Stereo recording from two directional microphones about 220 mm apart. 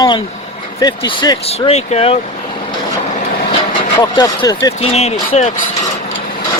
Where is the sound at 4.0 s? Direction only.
15° left (ahead or behind).